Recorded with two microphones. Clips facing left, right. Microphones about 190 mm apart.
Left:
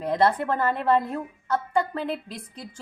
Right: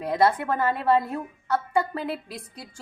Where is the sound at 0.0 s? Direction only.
10° right (ahead or behind).